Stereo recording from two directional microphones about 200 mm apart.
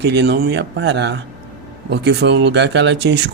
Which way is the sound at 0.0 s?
60° right (ahead or behind).